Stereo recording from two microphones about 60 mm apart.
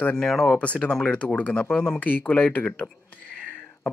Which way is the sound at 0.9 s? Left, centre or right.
Centre.